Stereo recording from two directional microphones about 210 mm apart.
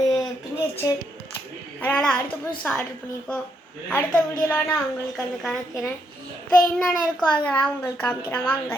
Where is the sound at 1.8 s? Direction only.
5° left (ahead or behind).